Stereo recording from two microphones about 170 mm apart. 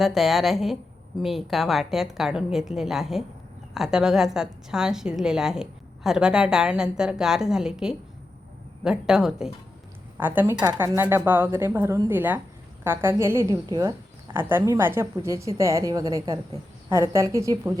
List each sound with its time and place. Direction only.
0.0 s a woman's voice: centre (ahead or behind); by 17.7 s 20° right (ahead or behind)